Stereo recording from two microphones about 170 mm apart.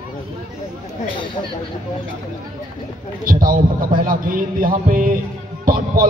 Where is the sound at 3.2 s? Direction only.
55° right (ahead or behind).